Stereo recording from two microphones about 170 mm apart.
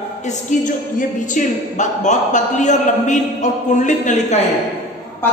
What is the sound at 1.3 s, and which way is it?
A man's voice, 45° left (ahead or behind).